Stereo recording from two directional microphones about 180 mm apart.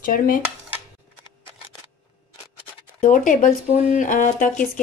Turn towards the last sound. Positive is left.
turn(degrees=45)  # may be behind; listen again after turning